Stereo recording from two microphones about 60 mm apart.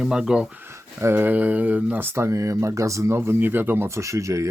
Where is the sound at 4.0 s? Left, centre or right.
Right.